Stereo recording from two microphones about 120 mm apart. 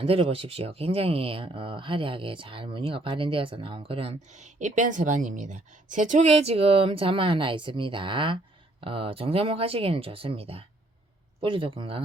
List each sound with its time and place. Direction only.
0.0 s speech: 50° right (ahead or behind)